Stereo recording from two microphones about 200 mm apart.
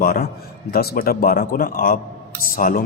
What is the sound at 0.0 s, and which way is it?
A man's voice, 50° left (ahead or behind).